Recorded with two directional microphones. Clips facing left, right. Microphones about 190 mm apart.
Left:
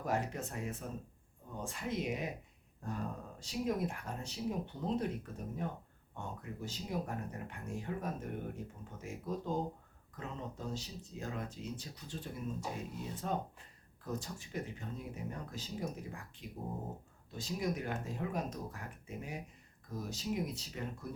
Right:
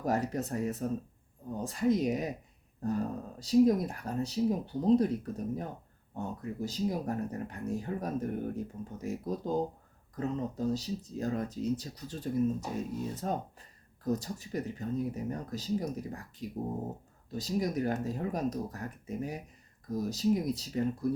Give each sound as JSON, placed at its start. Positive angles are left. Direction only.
{"t": 0.0, "sound": "speech", "side_deg": -40}
{"t": 17.3, "sound": "speech", "side_deg": -40}